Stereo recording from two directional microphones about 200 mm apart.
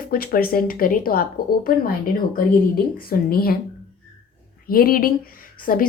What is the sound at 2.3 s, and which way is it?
A woman's voice, 50° left (ahead or behind).